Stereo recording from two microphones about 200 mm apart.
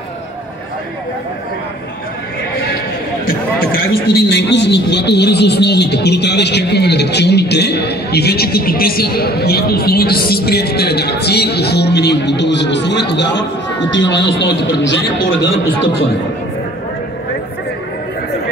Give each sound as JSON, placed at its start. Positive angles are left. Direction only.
{"t": 3.3, "sound": "a man's voice", "side_deg": 50}